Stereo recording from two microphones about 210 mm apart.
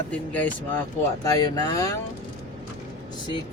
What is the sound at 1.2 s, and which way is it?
Speech, 20° left (ahead or behind).